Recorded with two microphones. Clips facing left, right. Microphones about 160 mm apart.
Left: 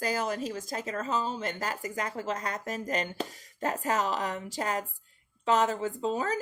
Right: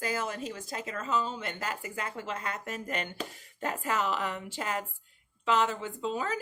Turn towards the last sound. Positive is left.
turn(degrees=40)  # may be behind; listen again after turning